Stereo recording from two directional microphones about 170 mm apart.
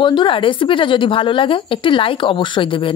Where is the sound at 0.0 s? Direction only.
30° left (ahead or behind).